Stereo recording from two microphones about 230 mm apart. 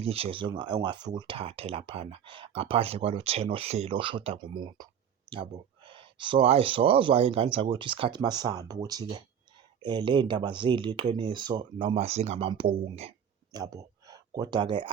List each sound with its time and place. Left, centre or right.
0.0 s speech: right